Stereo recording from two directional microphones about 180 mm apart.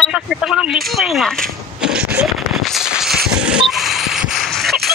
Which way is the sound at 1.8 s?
5° right (ahead or behind).